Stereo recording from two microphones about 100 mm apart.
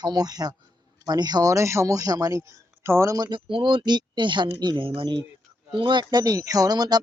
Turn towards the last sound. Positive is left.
turn(degrees=-40)  # may be behind; listen again after turning